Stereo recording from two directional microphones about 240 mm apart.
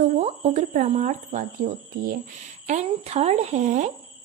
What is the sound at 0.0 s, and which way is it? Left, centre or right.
Speech, right.